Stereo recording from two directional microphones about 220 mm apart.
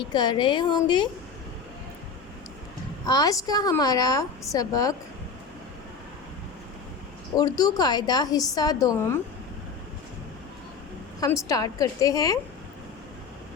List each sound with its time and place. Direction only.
0.1 s a woman's voice: 20° left (ahead or behind)
3.1 s a woman's voice: 15° left (ahead or behind)
7.3 s a woman's voice: 15° left (ahead or behind)
11.2 s a woman's voice: 15° left (ahead or behind)